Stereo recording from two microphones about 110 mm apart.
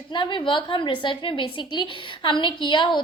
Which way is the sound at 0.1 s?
45° left (ahead or behind).